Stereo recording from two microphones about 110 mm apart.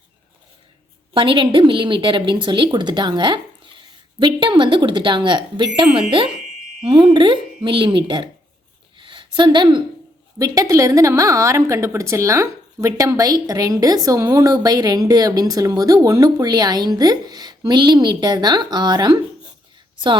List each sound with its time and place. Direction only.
1.1 s a woman's voice: 50° right (ahead or behind)
9.0 s a sound: 50° right (ahead or behind)
10.3 s a woman's voice: 30° right (ahead or behind)